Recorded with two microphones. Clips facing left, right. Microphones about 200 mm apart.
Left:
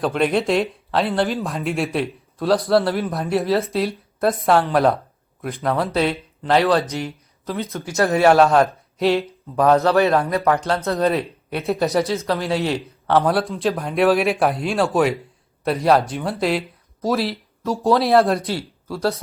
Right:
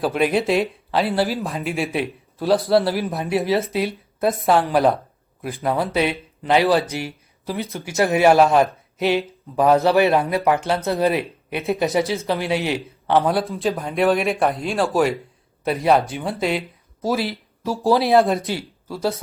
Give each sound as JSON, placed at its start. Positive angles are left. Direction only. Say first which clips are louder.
{"t": 0.0, "sound": "speech", "louder": "even", "side_deg": -5}
{"t": 7.7, "sound": "speech", "louder": "left 2 dB", "side_deg": -30}
{"t": 7.9, "sound": "a man's voice", "louder": "even", "side_deg": -15}